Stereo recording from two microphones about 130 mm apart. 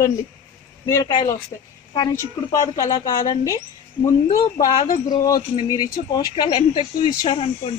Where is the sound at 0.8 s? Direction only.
20° left (ahead or behind).